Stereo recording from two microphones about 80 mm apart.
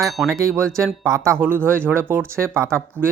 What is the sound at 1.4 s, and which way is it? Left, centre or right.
Speech, right.